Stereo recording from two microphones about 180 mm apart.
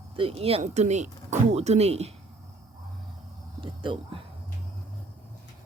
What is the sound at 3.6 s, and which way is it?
Speech, 30° right (ahead or behind).